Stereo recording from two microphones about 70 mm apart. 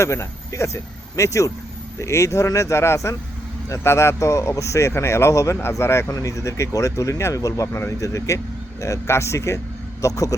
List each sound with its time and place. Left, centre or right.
0.0 s speech: left